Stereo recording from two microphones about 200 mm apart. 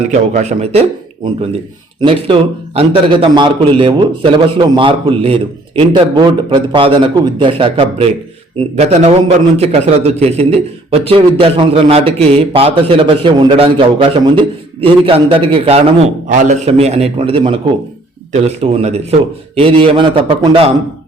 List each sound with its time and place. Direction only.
0.1 s a man's voice: 35° right (ahead or behind)